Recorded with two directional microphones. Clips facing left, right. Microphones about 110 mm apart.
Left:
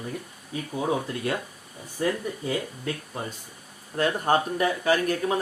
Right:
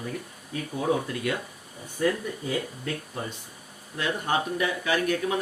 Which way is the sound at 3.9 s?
45° left (ahead or behind).